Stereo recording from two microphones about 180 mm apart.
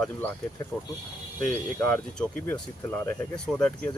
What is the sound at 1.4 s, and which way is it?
Speech, 5° left (ahead or behind).